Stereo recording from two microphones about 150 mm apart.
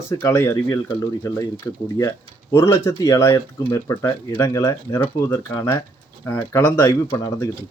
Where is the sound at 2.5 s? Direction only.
20° left (ahead or behind).